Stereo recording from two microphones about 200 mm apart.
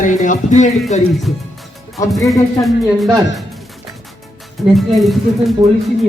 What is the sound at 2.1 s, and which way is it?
Speech, centre (ahead or behind).